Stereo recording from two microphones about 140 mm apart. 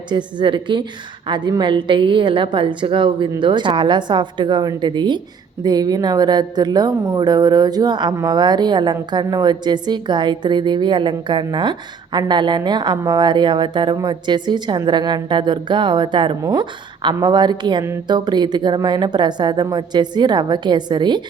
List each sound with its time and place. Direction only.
0.1 s a woman's voice: 35° right (ahead or behind)